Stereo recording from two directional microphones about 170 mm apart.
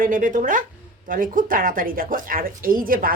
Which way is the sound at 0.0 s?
50° right (ahead or behind).